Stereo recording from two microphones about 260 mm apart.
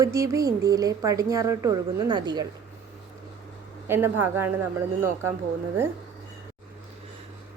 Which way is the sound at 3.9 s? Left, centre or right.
Centre.